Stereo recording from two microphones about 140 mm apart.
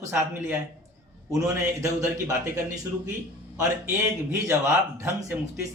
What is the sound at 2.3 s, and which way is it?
A man's voice, 20° right (ahead or behind).